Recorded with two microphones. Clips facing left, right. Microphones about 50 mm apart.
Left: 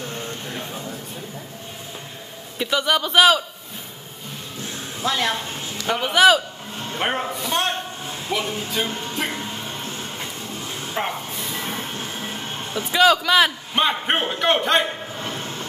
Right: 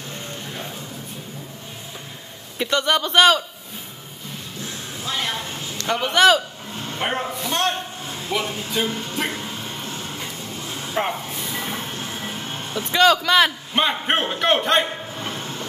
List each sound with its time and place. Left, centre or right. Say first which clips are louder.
2.6 s a man's voice: right 1 dB; centre
5.1 s speech: left 5 dB; left
5.8 s a man's voice: even; centre
11.0 s vehicle: right 2 dB; centre
12.7 s a man's voice: even; centre